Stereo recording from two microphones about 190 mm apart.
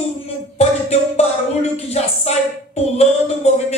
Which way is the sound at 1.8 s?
35° left (ahead or behind).